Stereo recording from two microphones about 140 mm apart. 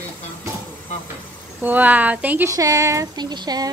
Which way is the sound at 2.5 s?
25° right (ahead or behind).